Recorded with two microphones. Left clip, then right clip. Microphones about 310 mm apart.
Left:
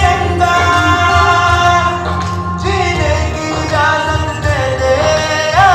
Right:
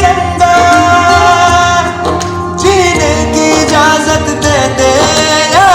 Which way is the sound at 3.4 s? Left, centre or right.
Right.